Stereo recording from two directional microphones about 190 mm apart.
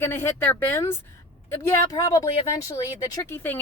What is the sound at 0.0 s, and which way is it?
A woman's voice, 10° left (ahead or behind).